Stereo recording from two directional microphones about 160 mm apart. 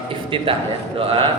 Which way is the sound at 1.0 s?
35° right (ahead or behind).